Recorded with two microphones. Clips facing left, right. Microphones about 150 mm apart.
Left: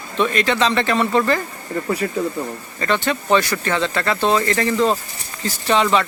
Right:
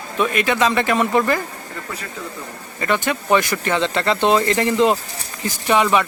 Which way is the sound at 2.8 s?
10° right (ahead or behind).